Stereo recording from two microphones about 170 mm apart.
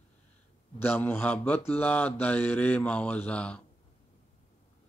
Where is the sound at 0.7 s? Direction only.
10° left (ahead or behind).